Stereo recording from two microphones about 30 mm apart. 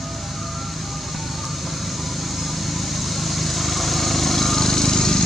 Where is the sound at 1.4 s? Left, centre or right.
Centre.